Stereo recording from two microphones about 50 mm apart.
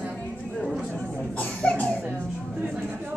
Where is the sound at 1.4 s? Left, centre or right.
Left.